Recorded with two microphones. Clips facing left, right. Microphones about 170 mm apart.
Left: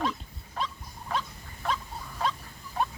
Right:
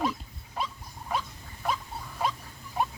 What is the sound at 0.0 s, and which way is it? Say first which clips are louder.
Dog: right 1 dB; 10° right (ahead or behind).